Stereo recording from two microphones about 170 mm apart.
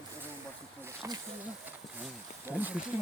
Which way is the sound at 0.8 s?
20° right (ahead or behind).